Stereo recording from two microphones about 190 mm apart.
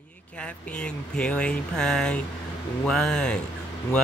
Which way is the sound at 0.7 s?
5° left (ahead or behind).